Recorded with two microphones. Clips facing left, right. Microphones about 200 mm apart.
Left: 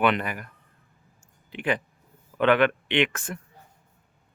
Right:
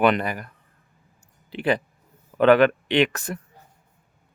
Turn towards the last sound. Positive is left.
turn(degrees=-40)  # may be behind; listen again after turning